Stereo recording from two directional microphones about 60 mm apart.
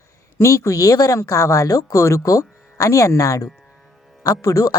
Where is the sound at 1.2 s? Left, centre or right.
Left.